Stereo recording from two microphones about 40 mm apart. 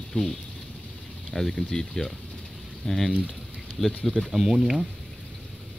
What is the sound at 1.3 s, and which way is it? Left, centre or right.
Speech, centre.